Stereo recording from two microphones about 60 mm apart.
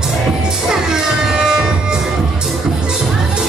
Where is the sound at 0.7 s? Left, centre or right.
Centre.